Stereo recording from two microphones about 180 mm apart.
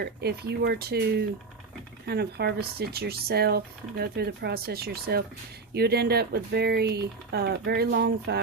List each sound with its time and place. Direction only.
0.0 s speech: 65° right (ahead or behind)